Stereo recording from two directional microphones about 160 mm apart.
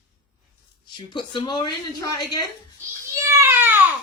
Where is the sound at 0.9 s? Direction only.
30° left (ahead or behind).